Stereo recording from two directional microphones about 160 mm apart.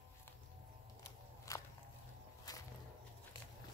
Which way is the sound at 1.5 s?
20° left (ahead or behind).